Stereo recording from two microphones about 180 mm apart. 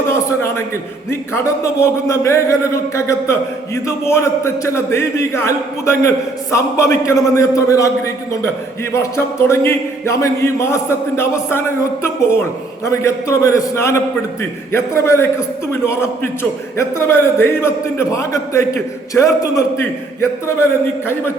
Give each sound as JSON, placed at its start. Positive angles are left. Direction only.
{"t": 0.1, "sound": "a sound", "side_deg": 15}
{"t": 1.1, "sound": "a man's voice", "side_deg": 15}
{"t": 8.9, "sound": "a man's voice", "side_deg": 15}
{"t": 12.8, "sound": "a man's voice", "side_deg": 15}